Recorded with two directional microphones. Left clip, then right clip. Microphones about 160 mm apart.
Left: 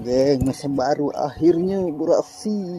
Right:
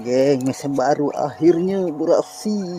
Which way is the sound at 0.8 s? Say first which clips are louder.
Right 3 dB; 5° right (ahead or behind).